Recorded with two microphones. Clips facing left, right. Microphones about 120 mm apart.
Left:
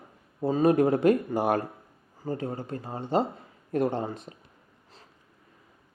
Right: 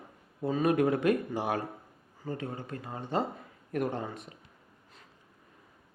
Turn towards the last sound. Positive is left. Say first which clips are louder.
# left 5 dB
turn(degrees=30)  # may be behind; listen again after turning